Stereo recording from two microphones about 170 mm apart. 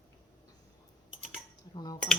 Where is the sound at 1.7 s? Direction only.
25° left (ahead or behind).